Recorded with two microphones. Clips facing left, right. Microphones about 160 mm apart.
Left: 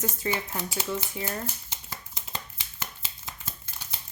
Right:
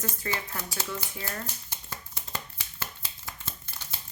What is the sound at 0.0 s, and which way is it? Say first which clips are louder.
Speech: left 4 dB; 20° left (ahead or behind).